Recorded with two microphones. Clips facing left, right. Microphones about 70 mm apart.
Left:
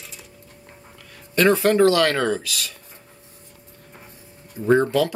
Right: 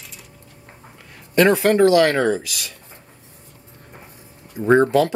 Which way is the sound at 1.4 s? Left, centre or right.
Right.